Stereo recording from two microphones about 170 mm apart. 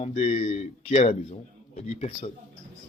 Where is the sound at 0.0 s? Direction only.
35° left (ahead or behind).